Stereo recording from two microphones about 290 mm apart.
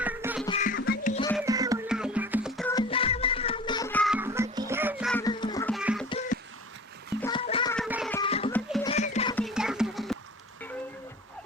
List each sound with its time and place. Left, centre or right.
0.0 s music: centre
0.4 s music: left
1.4 s music: centre
2.7 s music: centre
5.2 s music: centre
5.7 s music: centre
6.1 s music: left
7.2 s a sound: centre
7.9 s music: centre
8.1 s music: centre
8.5 s music: centre
8.9 s music: left
9.3 s music: centre